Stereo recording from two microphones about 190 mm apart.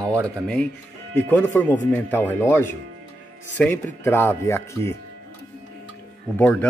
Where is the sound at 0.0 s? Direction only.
15° right (ahead or behind).